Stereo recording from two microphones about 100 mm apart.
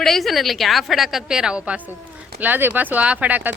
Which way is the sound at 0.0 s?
Centre (ahead or behind).